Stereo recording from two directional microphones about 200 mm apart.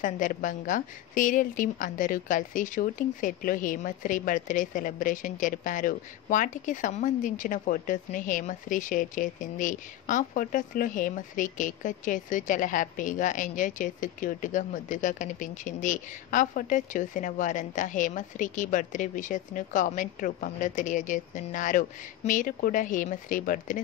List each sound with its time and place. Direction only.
0.0 s a woman's voice: 40° left (ahead or behind)